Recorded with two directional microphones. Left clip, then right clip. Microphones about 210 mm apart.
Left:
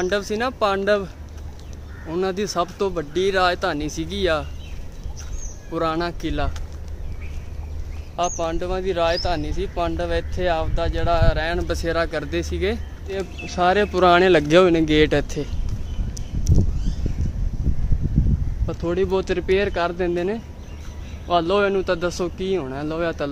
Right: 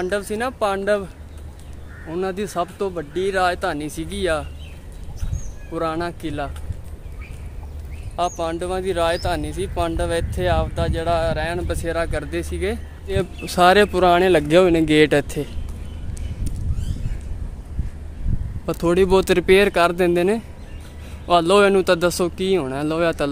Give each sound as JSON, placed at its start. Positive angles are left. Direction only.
{"t": 0.0, "sound": "speech", "side_deg": 0}
{"t": 5.7, "sound": "speech", "side_deg": 0}
{"t": 8.2, "sound": "speech", "side_deg": -20}
{"t": 11.2, "sound": "speech", "side_deg": -5}
{"t": 11.6, "sound": "speech", "side_deg": 5}
{"t": 13.1, "sound": "speech", "side_deg": -50}
{"t": 13.6, "sound": "speech", "side_deg": -35}
{"t": 13.9, "sound": "speech", "side_deg": 0}
{"t": 18.7, "sound": "speech", "side_deg": -55}